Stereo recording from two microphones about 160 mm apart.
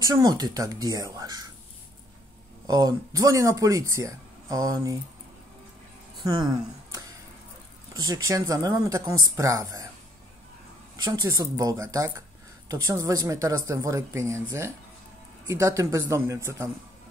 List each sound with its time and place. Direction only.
0.0 s speech: 25° right (ahead or behind)
2.6 s speech: 25° right (ahead or behind)
6.2 s speech: 25° right (ahead or behind)
11.1 s speech: 20° right (ahead or behind)
15.4 s speech: 20° right (ahead or behind)